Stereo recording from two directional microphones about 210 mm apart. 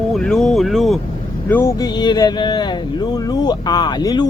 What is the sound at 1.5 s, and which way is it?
Speech, 10° left (ahead or behind).